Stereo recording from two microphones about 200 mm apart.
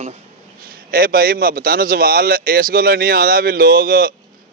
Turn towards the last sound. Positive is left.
turn(degrees=-45)  # may be behind; listen again after turning